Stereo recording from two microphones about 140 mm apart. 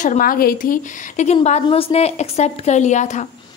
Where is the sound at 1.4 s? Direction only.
50° left (ahead or behind).